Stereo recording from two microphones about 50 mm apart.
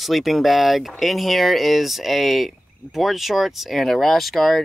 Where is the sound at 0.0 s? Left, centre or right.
Centre.